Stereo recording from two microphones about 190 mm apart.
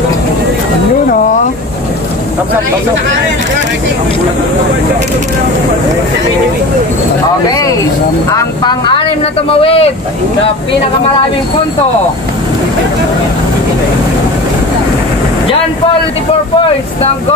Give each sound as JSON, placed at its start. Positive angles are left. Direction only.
{"t": 7.4, "sound": "speech", "side_deg": 20}